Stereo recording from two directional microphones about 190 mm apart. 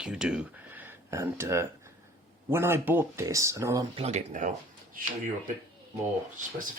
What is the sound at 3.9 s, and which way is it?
Speech, 35° right (ahead or behind).